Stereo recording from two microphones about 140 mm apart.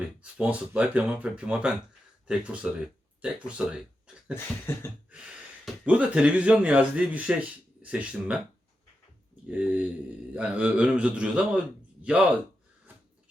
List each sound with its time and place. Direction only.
0.2 s a man's voice: 10° right (ahead or behind)
4.7 s a sound: 15° left (ahead or behind)
5.6 s a man's voice: 10° right (ahead or behind)
9.5 s a man's voice: 10° right (ahead or behind)